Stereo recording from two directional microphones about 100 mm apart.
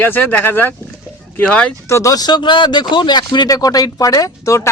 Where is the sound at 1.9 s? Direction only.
35° left (ahead or behind); by 3.3 s 50° left (ahead or behind).